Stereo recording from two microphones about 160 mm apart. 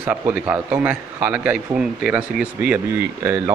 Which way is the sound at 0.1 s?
10° right (ahead or behind).